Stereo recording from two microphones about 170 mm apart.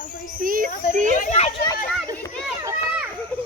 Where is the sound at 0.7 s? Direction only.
55° left (ahead or behind).